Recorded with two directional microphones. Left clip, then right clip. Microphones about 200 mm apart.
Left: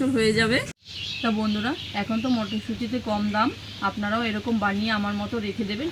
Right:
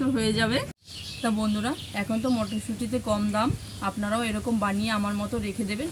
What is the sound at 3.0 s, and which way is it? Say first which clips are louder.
Speech: left 1 dB; 25° right (ahead or behind).